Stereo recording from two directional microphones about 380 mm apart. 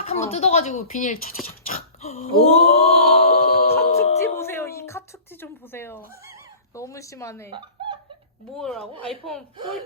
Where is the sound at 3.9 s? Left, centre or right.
Centre.